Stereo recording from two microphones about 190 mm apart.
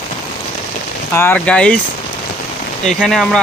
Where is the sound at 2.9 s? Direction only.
Centre (ahead or behind).